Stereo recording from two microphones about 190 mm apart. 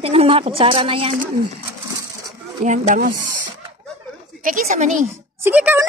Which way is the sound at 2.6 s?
40° right (ahead or behind).